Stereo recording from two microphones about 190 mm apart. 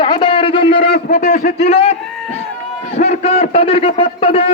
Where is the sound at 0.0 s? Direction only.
25° left (ahead or behind).